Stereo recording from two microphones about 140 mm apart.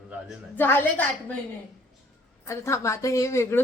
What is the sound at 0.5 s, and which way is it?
Speech, 15° left (ahead or behind).